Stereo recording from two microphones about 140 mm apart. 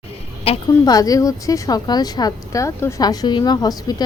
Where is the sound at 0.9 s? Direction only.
25° left (ahead or behind).